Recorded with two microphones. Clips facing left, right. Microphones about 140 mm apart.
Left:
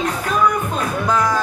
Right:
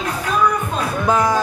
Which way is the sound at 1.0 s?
15° right (ahead or behind).